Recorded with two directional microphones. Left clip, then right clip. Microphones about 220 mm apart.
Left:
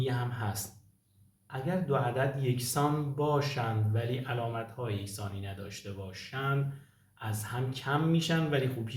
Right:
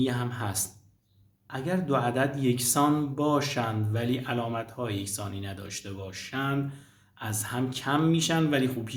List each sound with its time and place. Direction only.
0.0 s speech: 45° right (ahead or behind)